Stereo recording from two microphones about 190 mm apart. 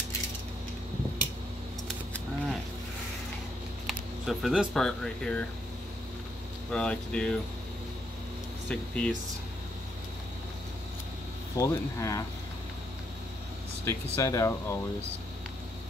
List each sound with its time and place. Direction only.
3.8 s speech: centre (ahead or behind)
6.7 s speech: 5° left (ahead or behind)
8.6 s speech: 5° left (ahead or behind)
11.5 s speech: 15° left (ahead or behind)
13.8 s speech: 15° left (ahead or behind)